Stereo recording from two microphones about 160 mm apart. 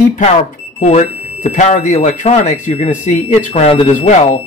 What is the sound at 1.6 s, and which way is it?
Speech, 45° left (ahead or behind).